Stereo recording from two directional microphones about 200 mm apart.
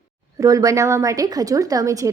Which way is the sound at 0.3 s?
15° right (ahead or behind).